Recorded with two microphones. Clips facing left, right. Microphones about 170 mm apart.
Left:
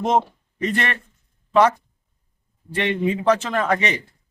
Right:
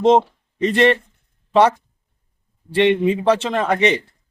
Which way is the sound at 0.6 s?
30° right (ahead or behind).